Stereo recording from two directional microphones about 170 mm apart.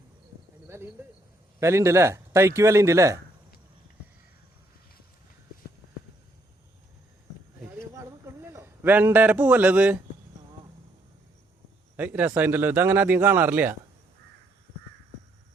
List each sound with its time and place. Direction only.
0.7 s speech: 15° right (ahead or behind)
7.6 s a sound: 15° right (ahead or behind)
11.9 s speech: 10° right (ahead or behind)